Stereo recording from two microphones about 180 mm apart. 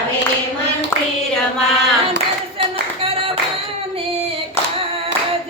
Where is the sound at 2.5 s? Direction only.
30° right (ahead or behind).